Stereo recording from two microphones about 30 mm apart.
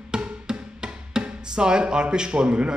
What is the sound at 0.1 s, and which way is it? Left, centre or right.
Music, right.